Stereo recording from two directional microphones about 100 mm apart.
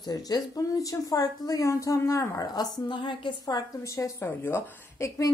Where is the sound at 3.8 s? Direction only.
30° left (ahead or behind).